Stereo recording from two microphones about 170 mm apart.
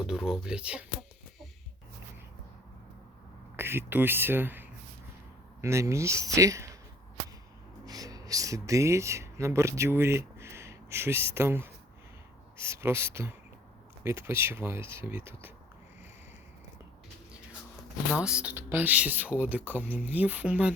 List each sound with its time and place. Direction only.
0.0 s speech: 5° right (ahead or behind)
3.6 s speech: 15° right (ahead or behind)
7.9 s speech: 20° right (ahead or behind)
18.2 s speech: 5° right (ahead or behind)